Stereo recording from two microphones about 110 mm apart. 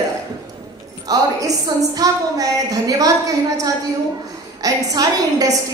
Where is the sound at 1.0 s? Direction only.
35° right (ahead or behind).